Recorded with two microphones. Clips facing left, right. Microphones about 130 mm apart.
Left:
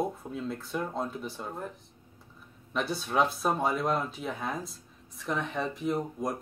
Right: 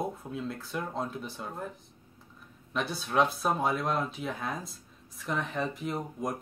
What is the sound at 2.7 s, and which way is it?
Speech, centre (ahead or behind).